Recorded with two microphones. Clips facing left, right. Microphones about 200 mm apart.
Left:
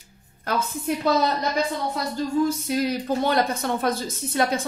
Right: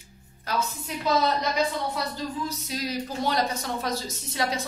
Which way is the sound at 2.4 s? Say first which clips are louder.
Left 9 dB; 55° left (ahead or behind).